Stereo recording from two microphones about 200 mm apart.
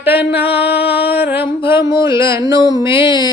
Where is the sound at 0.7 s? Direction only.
55° left (ahead or behind).